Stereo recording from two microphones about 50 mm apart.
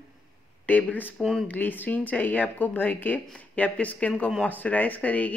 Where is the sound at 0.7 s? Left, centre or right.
Left.